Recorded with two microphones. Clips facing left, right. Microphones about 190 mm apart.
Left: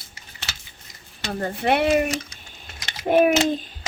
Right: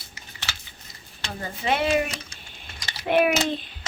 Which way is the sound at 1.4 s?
60° left (ahead or behind).